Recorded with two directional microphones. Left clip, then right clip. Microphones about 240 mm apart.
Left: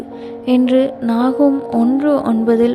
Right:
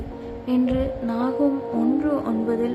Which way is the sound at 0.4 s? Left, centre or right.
Left.